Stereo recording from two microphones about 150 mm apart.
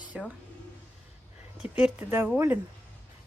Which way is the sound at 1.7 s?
10° right (ahead or behind).